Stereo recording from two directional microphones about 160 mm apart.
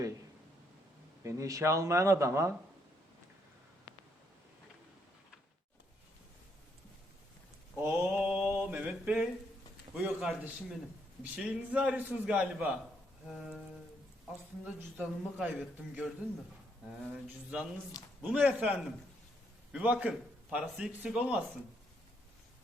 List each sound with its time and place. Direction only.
1.2 s speech: 20° right (ahead or behind)
7.8 s mantra: 10° right (ahead or behind)
8.8 s a sound: 5° right (ahead or behind)
9.9 s a man's voice: 5° right (ahead or behind)
14.6 s speech: 10° right (ahead or behind)
17.2 s a man's voice: 10° right (ahead or behind)